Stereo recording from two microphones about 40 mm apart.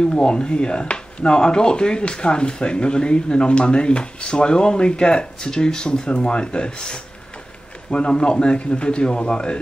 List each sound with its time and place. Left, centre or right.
0.0 s speech: left